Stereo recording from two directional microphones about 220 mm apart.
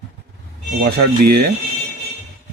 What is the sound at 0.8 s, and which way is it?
Speech, 45° right (ahead or behind).